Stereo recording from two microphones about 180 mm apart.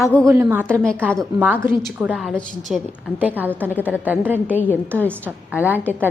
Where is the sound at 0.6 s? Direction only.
5° left (ahead or behind); by 4.6 s 10° right (ahead or behind).